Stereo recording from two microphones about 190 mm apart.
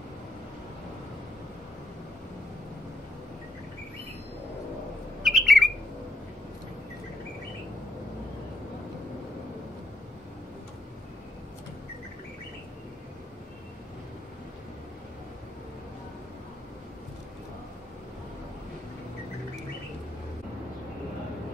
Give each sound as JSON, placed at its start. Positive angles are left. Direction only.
{"t": 5.2, "sound": "bird", "side_deg": 0}